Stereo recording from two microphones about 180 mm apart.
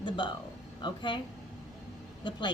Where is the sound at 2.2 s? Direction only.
25° left (ahead or behind).